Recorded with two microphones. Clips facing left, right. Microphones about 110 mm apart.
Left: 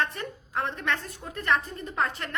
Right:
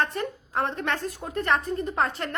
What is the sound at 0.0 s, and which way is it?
A woman's voice, 35° right (ahead or behind).